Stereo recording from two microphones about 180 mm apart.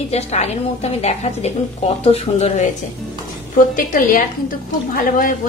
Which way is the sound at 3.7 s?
50° left (ahead or behind).